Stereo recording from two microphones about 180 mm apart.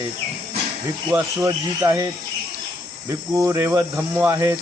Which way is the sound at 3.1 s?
15° right (ahead or behind).